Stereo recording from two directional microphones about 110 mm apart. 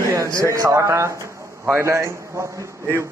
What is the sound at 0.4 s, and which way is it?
A man's voice, 30° right (ahead or behind).